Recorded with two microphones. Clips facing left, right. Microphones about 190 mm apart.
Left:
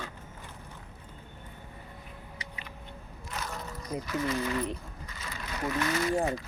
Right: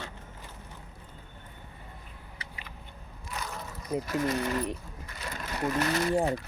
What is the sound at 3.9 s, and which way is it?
Speech, 10° right (ahead or behind).